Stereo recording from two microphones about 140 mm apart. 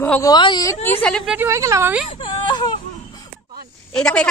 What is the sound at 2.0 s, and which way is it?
Whimper, 45° left (ahead or behind).